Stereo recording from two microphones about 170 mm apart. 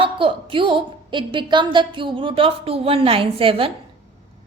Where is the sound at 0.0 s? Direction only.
30° right (ahead or behind).